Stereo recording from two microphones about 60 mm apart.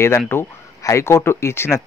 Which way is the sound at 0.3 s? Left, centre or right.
Left.